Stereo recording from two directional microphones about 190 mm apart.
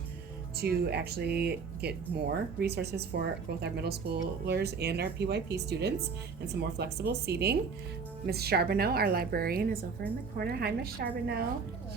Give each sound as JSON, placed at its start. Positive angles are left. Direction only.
{"t": 0.5, "sound": "a woman's voice", "side_deg": -55}